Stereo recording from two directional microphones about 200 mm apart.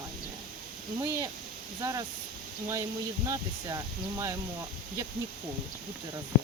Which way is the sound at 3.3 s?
15° right (ahead or behind).